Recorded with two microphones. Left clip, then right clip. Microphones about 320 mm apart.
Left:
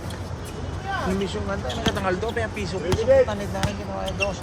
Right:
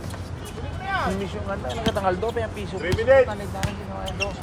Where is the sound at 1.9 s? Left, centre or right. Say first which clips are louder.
Right 4 dB; centre.